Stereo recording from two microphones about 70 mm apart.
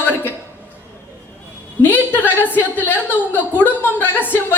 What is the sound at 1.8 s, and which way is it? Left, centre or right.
A woman's voice, left.